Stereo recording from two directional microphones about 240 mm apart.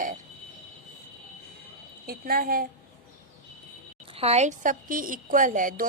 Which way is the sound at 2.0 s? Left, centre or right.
Right.